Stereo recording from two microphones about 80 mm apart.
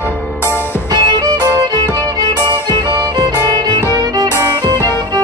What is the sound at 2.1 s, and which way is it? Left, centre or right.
Music, right.